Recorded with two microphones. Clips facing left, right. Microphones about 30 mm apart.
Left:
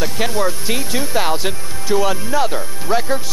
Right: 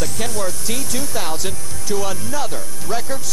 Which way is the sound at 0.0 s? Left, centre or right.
Left.